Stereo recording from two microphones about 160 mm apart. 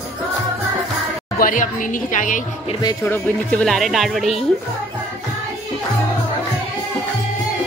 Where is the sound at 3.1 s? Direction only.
5° left (ahead or behind).